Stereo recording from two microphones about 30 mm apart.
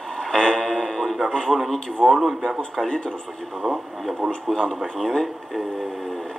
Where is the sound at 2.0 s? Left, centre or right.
Centre.